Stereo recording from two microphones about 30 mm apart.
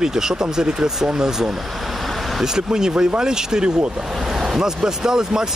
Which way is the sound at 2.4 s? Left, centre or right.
Centre.